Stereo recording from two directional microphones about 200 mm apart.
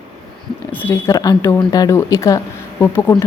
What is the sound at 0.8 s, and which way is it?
Speech, 15° left (ahead or behind).